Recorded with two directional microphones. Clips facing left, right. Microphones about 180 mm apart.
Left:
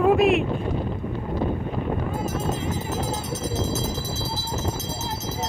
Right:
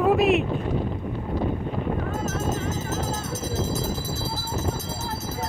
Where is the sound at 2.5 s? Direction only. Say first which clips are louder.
Even; 45° right (ahead or behind).